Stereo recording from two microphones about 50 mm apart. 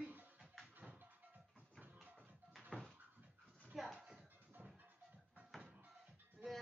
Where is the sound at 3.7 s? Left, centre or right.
Centre.